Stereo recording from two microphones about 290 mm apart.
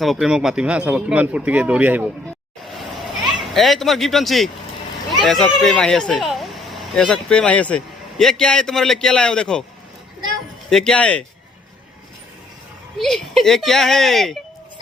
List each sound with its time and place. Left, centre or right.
0.0 s a man's voice: centre
3.5 s a man's voice: centre
10.7 s a man's voice: centre
13.0 s a man's voice: centre